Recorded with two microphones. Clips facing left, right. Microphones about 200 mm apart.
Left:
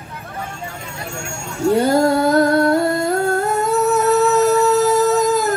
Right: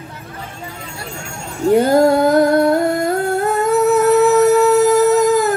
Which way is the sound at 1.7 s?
20° right (ahead or behind).